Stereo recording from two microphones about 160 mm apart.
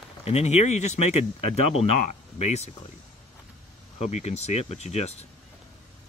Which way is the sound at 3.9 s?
45° left (ahead or behind).